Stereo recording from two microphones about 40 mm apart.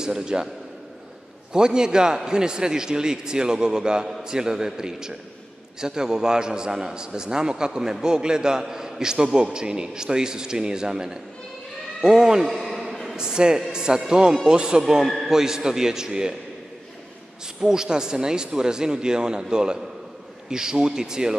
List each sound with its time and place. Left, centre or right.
0.0 s speech: centre
1.5 s a man's voice: centre
12.4 s a man's voice: centre
13.1 s a man's voice: centre
17.6 s a man's voice: centre